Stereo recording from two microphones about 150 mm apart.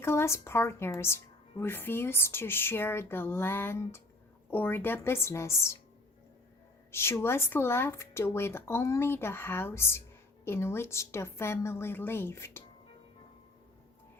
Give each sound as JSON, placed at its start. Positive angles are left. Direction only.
{"t": 0.0, "sound": "a woman's voice", "side_deg": 15}
{"t": 6.9, "sound": "a woman's voice", "side_deg": 15}